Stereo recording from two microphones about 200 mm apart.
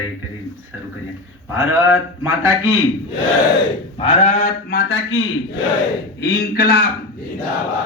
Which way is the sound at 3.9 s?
35° left (ahead or behind).